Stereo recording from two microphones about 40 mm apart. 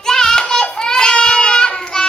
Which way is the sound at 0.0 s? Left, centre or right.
Centre.